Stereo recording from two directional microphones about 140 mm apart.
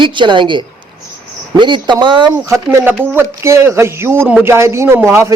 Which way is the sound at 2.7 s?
15° right (ahead or behind).